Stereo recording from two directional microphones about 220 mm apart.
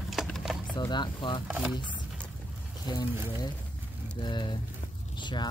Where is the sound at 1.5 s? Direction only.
5° right (ahead or behind).